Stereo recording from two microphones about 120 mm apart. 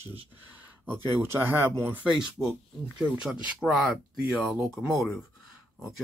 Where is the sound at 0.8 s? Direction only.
15° right (ahead or behind).